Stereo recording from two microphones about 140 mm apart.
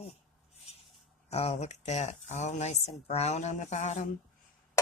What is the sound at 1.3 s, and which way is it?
Speech, 50° left (ahead or behind).